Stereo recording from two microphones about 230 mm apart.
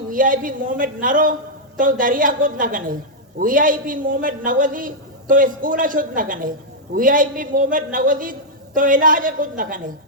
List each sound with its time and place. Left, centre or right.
0.1 s a woman's voice: right